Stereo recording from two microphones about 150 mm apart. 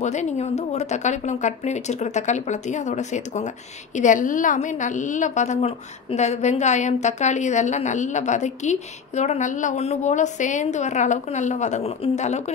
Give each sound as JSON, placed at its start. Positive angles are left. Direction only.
{"t": 0.0, "sound": "a woman's voice", "side_deg": 50}